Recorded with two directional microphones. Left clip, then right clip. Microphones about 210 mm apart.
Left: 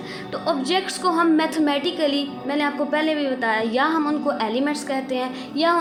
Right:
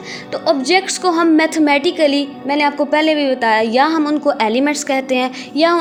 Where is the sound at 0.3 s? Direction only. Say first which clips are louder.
Right 8 dB; 35° right (ahead or behind).